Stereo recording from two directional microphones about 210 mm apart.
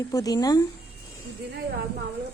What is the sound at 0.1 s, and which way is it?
Speech, 15° left (ahead or behind).